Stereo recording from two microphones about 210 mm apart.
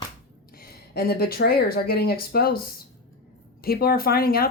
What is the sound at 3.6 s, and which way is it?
Speech, 45° left (ahead or behind).